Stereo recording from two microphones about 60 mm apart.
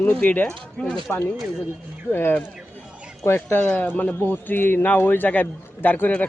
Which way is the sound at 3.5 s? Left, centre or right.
Left.